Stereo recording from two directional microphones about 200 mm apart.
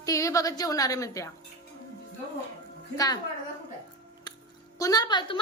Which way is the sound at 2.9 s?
20° left (ahead or behind).